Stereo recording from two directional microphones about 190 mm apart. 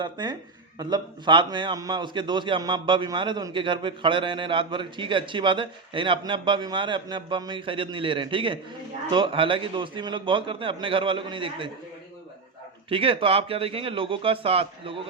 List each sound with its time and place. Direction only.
0.0 s a man's voice: 25° right (ahead or behind)
12.9 s a man's voice: 30° right (ahead or behind)